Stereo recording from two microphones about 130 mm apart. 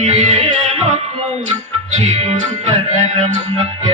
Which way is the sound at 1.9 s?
55° right (ahead or behind).